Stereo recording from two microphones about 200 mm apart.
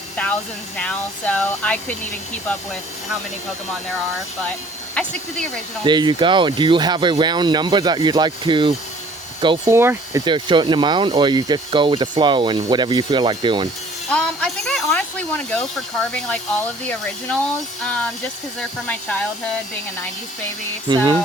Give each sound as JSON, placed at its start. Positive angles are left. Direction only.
{"t": 0.2, "sound": "a sound", "side_deg": 5}
{"t": 0.8, "sound": "speech", "side_deg": 5}
{"t": 5.0, "sound": "speech", "side_deg": 5}
{"t": 5.8, "sound": "speech", "side_deg": -20}
{"t": 9.7, "sound": "speech", "side_deg": -10}
{"t": 14.1, "sound": "speech", "side_deg": 5}
{"t": 20.8, "sound": "speech", "side_deg": -20}